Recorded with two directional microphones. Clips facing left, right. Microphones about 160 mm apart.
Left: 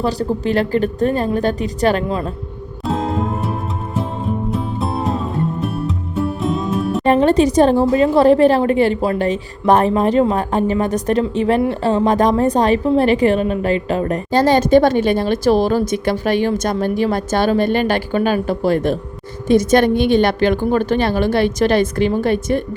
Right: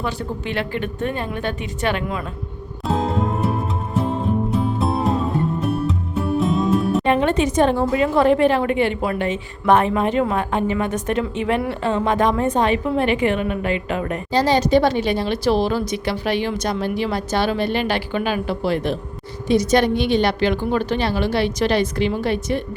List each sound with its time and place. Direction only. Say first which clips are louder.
0.0 s a woman's voice: left 7 dB; 35° left (ahead or behind)
2.8 s music: left 1 dB; centre (ahead or behind)
4.5 s music: right 1 dB; centre (ahead or behind)
7.0 s a woman's voice: left 5 dB; 35° left (ahead or behind)
14.3 s speech: left 4 dB; 50° left (ahead or behind)